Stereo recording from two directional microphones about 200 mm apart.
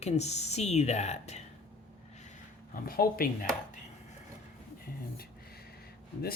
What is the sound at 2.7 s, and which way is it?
Speech, 45° left (ahead or behind).